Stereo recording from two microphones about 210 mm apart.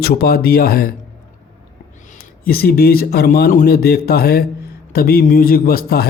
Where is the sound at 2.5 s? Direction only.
45° left (ahead or behind).